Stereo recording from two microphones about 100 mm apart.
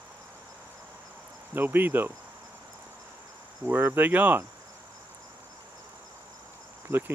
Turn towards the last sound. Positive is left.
turn(degrees=-25)  # may be behind; listen again after turning